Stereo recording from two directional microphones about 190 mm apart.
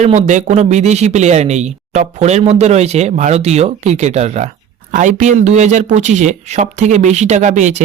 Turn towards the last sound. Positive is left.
turn(degrees=-40)  # may be behind; listen again after turning